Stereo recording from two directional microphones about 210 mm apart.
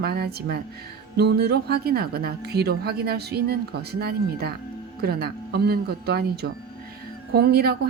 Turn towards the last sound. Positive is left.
turn(degrees=-50)  # may be behind; listen again after turning